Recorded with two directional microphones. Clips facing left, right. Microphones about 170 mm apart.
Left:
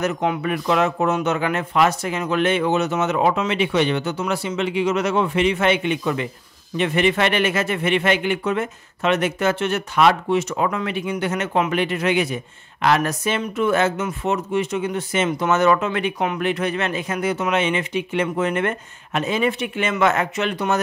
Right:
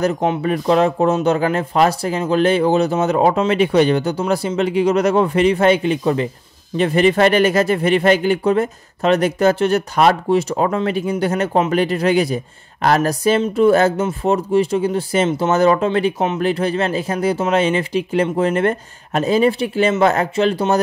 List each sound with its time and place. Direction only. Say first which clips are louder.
0.0 s speech: right 4 dB; 30° right (ahead or behind)